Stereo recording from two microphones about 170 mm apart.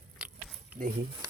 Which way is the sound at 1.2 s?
20° right (ahead or behind).